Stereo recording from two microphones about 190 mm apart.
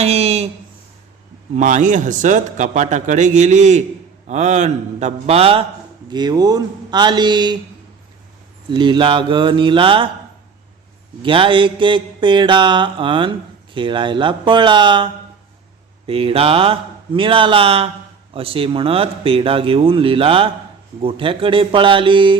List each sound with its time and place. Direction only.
0.0 s a man's voice: 35° right (ahead or behind)
1.5 s a man's voice: 40° right (ahead or behind)
6.1 s mantra: 20° right (ahead or behind)
8.7 s mantra: 25° right (ahead or behind)
11.2 s mantra: 25° right (ahead or behind)